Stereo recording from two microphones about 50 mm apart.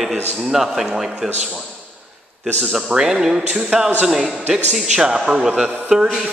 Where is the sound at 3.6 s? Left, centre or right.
Centre.